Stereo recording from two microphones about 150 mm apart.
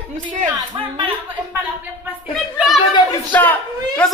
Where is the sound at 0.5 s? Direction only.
30° right (ahead or behind).